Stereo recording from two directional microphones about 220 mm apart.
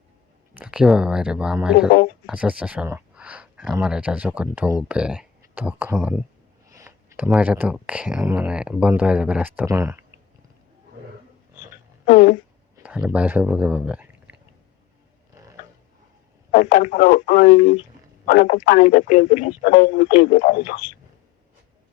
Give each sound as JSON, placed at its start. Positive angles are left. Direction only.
{"t": 0.5, "sound": "speech", "side_deg": -5}
{"t": 6.7, "sound": "a sound", "side_deg": -15}
{"t": 7.3, "sound": "speech", "side_deg": -5}
{"t": 12.0, "sound": "a sound", "side_deg": 40}
{"t": 12.7, "sound": "speech", "side_deg": -5}
{"t": 16.5, "sound": "speech", "side_deg": 35}